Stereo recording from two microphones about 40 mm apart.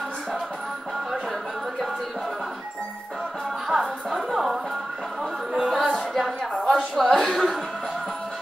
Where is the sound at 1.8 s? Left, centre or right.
Centre.